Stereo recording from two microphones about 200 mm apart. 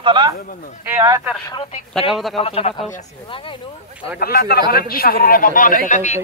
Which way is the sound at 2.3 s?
30° left (ahead or behind).